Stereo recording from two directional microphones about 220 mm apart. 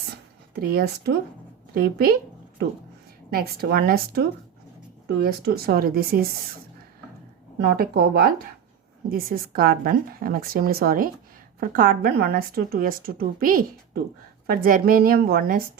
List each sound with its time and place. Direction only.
0.5 s speech: 45° right (ahead or behind)
3.2 s speech: 45° right (ahead or behind)
7.8 s a woman's voice: 45° right (ahead or behind)